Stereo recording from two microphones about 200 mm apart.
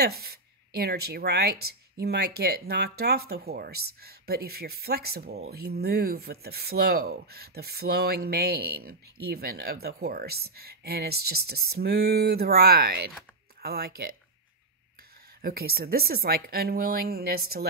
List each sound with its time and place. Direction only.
0.0 s speech: 50° right (ahead or behind)
15.4 s speech: 50° right (ahead or behind)